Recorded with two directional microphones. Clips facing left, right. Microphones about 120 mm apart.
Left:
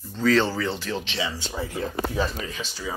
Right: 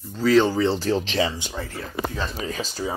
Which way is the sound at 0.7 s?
40° right (ahead or behind).